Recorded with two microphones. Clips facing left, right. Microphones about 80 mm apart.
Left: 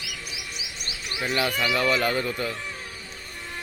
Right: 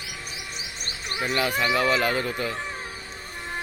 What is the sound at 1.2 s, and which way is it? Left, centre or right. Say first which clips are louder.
Speech: right 1 dB; centre.